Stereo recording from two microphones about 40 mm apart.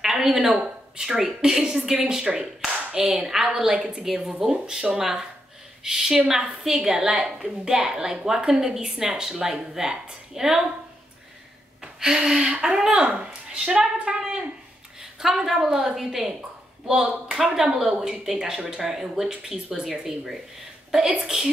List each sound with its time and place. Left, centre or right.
0.0 s speech: centre
0.5 s a woman's voice: right
11.8 s gasp: centre
12.6 s a woman's voice: centre
15.0 s a woman's voice: centre
17.3 s a woman's voice: centre